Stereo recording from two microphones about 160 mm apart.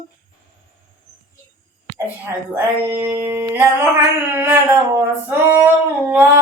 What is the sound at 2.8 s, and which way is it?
Humming, 15° right (ahead or behind).